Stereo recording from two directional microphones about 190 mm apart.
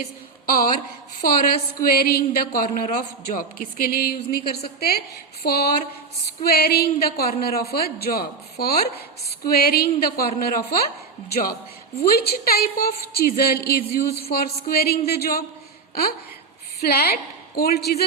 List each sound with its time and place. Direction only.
0.4 s speech: 50° left (ahead or behind)
1.8 s speech: 55° left (ahead or behind)
16.8 s speech: 55° left (ahead or behind)